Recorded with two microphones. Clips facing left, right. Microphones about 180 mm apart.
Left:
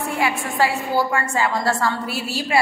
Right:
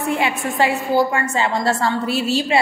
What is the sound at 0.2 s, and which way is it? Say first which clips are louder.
A woman's voice: right 1 dB; 20° right (ahead or behind).